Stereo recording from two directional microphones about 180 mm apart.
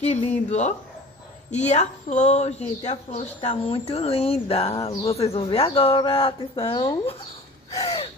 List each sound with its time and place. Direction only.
0.0 s speech: 40° left (ahead or behind)